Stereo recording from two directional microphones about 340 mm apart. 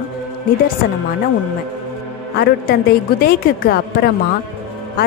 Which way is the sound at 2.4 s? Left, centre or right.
Left.